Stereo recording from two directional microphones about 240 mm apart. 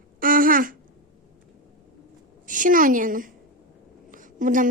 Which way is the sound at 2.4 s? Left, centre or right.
Right.